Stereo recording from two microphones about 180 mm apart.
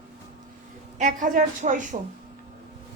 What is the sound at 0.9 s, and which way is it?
A woman's voice, 45° right (ahead or behind).